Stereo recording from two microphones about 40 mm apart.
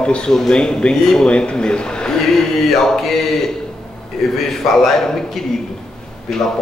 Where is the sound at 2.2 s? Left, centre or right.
Centre.